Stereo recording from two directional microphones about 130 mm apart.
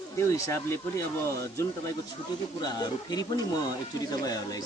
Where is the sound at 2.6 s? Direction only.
30° left (ahead or behind).